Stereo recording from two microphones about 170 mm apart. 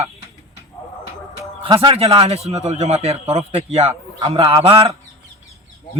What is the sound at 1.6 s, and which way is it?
A man's voice, 30° right (ahead or behind).